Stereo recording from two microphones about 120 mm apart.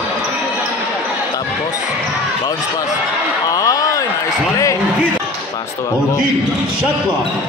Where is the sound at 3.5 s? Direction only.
30° left (ahead or behind).